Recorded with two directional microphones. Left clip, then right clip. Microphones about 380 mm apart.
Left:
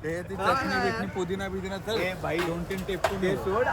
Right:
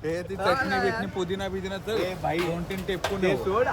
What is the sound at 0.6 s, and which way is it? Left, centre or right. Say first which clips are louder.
Speech: right 2 dB; centre.